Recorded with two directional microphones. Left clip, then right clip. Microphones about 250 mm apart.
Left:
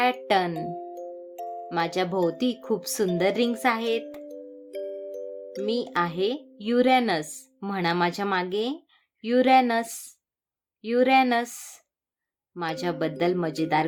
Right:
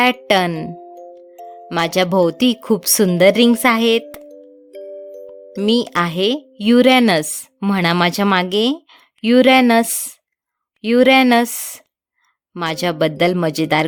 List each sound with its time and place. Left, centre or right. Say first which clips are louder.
0.3 s speech: right 8 dB; right
0.7 s music: right 1 dB; centre
1.7 s speech: right 10 dB; right
4.3 s music: right 1 dB; centre
5.6 s speech: right 9 dB; right